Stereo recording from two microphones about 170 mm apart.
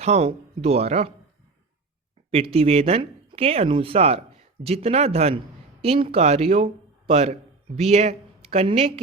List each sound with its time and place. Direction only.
0.0 s speech: 40° right (ahead or behind)
2.3 s speech: 35° right (ahead or behind)